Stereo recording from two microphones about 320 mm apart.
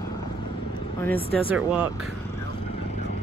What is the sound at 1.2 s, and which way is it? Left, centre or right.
Speech, centre.